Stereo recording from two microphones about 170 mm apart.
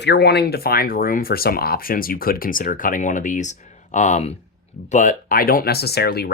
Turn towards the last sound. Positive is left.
turn(degrees=70)  # may be behind; listen again after turning